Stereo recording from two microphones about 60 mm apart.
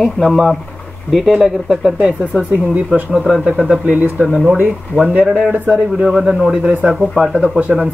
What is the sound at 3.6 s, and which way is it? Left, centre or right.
Speech, centre.